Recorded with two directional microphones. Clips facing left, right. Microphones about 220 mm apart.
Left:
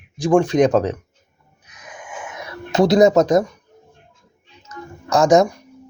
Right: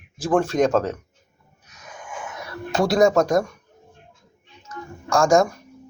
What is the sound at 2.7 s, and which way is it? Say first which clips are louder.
Speech: left 4 dB; 20° left (ahead or behind).